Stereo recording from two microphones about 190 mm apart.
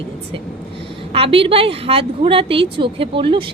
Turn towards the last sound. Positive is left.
turn(degrees=-25)  # may be behind; listen again after turning